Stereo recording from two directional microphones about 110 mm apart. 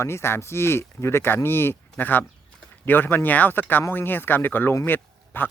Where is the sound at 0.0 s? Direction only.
25° left (ahead or behind).